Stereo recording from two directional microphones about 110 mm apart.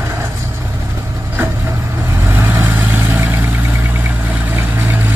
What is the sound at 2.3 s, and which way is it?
Vehicle, 20° right (ahead or behind).